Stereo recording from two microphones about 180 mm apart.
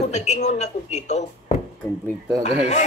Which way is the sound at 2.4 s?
40° left (ahead or behind).